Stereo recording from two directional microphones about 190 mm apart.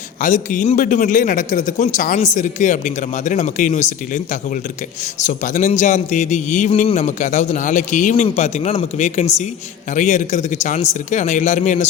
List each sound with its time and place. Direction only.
0.2 s a man's voice: 45° left (ahead or behind)